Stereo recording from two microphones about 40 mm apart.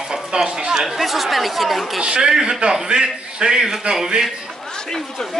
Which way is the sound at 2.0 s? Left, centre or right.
Centre.